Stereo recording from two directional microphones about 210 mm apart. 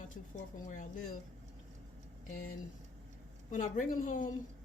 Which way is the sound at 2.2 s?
40° left (ahead or behind).